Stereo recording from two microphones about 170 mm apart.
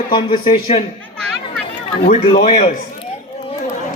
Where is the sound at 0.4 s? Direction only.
40° left (ahead or behind).